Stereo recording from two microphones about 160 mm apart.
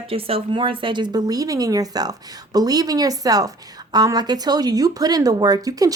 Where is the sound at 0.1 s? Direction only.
35° right (ahead or behind).